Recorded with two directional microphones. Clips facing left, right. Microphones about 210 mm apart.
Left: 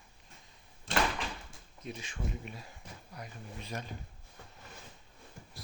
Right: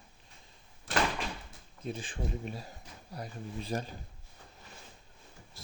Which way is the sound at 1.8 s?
30° right (ahead or behind).